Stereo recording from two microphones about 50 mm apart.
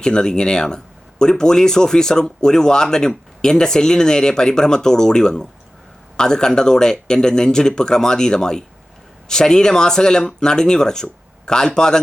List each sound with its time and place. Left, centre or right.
0.0 s speech: centre